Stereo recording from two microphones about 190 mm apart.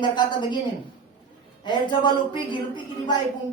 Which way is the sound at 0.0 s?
25° left (ahead or behind).